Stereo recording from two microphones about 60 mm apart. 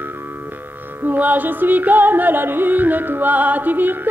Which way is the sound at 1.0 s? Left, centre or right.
Right.